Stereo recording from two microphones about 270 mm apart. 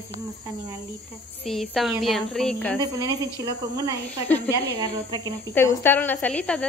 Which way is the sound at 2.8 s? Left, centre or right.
Centre.